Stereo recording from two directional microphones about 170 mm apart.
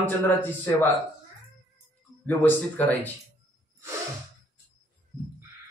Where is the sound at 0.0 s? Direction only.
10° left (ahead or behind).